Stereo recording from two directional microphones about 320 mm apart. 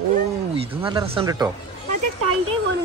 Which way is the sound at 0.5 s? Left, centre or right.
Centre.